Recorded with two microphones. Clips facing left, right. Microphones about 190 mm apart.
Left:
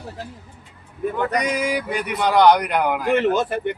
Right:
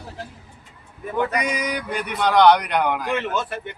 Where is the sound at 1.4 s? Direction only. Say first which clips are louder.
Left 3 dB; centre (ahead or behind).